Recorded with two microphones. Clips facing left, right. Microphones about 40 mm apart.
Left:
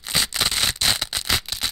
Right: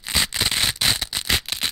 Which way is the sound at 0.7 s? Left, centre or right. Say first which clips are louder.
Even; centre.